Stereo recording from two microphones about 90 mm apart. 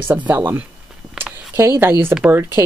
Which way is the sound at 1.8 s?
25° right (ahead or behind).